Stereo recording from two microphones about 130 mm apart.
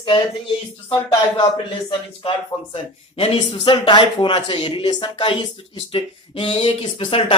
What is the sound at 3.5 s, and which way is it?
Speech, 40° left (ahead or behind).